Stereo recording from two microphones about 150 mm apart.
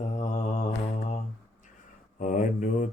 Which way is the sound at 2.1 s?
60° left (ahead or behind).